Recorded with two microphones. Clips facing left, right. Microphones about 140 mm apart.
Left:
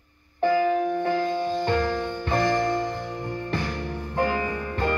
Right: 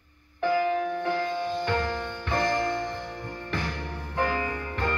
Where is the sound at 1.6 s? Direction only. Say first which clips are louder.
Left 4 dB; 35° left (ahead or behind).